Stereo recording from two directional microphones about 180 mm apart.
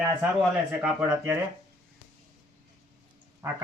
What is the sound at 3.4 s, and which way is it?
Speech, 15° right (ahead or behind).